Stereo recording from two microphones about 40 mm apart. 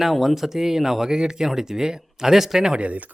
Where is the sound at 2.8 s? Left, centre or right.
Right.